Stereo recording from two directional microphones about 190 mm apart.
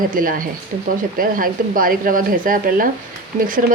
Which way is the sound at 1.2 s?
45° right (ahead or behind).